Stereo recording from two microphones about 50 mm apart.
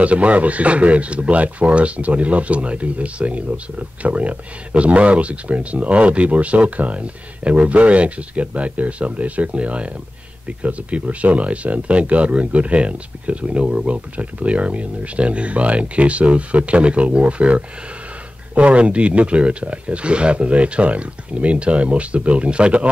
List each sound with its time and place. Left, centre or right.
0.0 s speech: right